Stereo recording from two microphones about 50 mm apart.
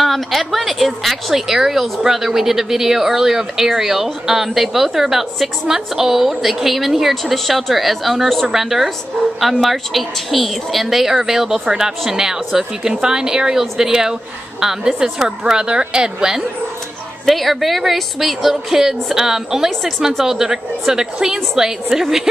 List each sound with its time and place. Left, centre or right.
0.0 s a woman's voice: centre
17.3 s a woman's voice: centre